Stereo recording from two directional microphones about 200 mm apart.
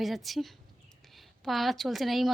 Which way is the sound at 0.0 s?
Centre (ahead or behind).